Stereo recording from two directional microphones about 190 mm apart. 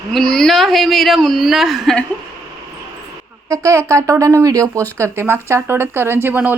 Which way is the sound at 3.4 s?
15° right (ahead or behind).